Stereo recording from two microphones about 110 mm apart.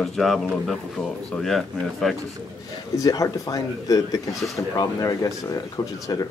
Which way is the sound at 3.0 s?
35° left (ahead or behind).